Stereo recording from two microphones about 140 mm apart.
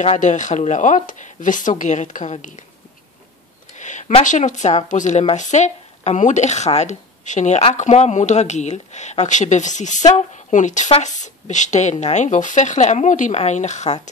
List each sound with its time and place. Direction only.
0.0 s speech: 55° left (ahead or behind)
3.7 s a sound: 60° left (ahead or behind)
4.2 s speech: 60° left (ahead or behind)